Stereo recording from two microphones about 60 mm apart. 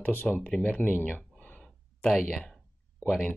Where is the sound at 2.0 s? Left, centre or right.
Centre.